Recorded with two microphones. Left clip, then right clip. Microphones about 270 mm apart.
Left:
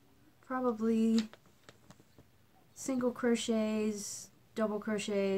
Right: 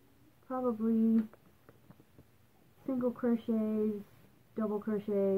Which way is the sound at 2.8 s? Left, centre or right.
Centre.